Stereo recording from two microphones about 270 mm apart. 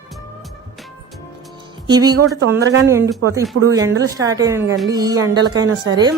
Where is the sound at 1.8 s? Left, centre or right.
Centre.